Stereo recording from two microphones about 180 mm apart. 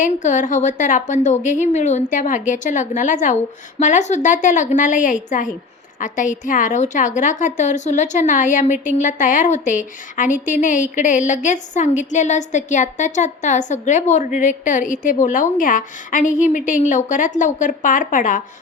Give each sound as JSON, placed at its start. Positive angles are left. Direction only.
{"t": 0.0, "sound": "a woman's voice", "side_deg": 45}